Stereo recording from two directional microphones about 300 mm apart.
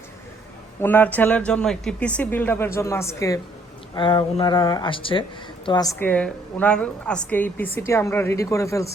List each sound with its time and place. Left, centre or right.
0.8 s a woman's voice: centre